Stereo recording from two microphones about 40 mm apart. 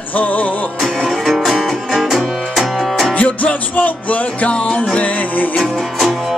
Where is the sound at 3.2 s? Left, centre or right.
Left.